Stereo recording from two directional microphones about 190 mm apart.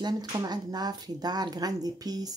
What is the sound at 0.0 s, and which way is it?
Speech, 20° right (ahead or behind).